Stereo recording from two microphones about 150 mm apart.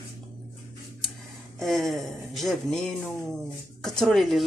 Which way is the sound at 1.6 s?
Centre (ahead or behind).